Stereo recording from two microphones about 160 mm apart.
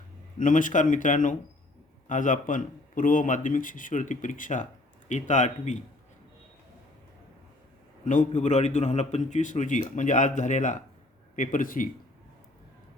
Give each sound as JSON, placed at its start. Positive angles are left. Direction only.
{"t": 0.3, "sound": "a man's voice", "side_deg": 55}
{"t": 8.0, "sound": "a man's voice", "side_deg": 50}